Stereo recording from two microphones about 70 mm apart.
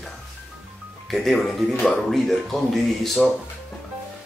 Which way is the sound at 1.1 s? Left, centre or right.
Centre.